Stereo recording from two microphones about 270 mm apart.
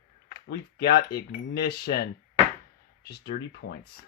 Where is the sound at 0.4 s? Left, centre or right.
Left.